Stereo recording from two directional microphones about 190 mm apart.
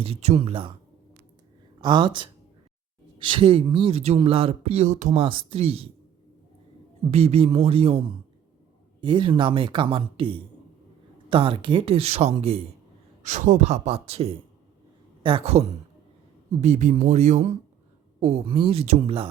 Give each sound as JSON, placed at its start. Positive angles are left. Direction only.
{"t": 0.0, "sound": "speech", "side_deg": -30}
{"t": 1.8, "sound": "speech", "side_deg": -25}
{"t": 5.2, "sound": "speech", "side_deg": -25}
{"t": 7.1, "sound": "speech", "side_deg": -30}
{"t": 13.2, "sound": "a man's voice", "side_deg": -40}